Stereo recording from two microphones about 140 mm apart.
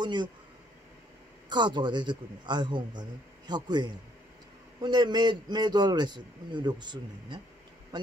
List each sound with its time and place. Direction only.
0.0 s a man's voice: 30° right (ahead or behind)
1.5 s a man's voice: 30° right (ahead or behind)